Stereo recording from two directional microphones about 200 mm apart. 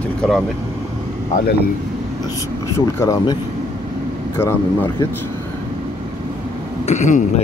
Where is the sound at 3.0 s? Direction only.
15° left (ahead or behind).